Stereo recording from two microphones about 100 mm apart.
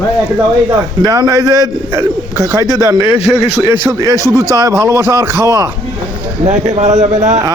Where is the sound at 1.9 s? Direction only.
25° right (ahead or behind).